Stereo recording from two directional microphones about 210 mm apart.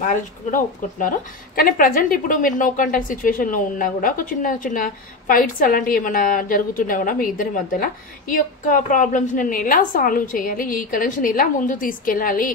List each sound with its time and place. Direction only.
0.0 s a woman's voice: 40° left (ahead or behind)